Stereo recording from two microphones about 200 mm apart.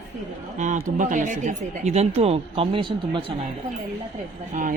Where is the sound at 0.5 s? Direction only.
40° right (ahead or behind).